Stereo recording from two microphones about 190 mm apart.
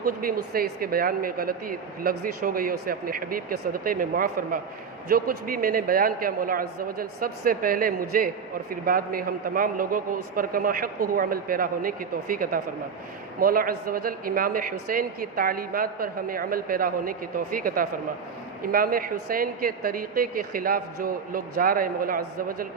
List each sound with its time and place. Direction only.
0.0 s speech: 50° right (ahead or behind)